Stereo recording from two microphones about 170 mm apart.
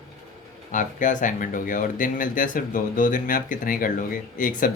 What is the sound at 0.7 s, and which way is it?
Speech, 50° left (ahead or behind).